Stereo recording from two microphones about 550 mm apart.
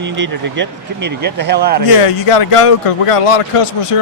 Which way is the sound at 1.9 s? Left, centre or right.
Left.